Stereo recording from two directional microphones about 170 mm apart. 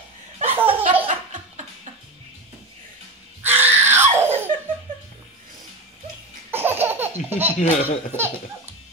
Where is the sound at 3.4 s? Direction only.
10° right (ahead or behind).